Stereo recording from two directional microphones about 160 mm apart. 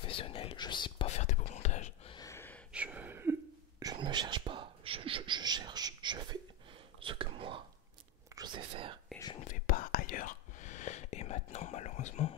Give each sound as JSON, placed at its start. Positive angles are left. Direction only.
{"t": 0.0, "sound": "whispering", "side_deg": 35}
{"t": 1.0, "sound": "whispering", "side_deg": 45}
{"t": 2.1, "sound": "a sound", "side_deg": 20}
{"t": 2.7, "sound": "a sound", "side_deg": -10}
{"t": 3.8, "sound": "whispering", "side_deg": -25}
{"t": 9.4, "sound": "whispering", "side_deg": 55}